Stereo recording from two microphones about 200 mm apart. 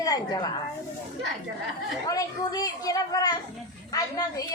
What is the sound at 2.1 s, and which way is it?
A woman's voice, 20° left (ahead or behind).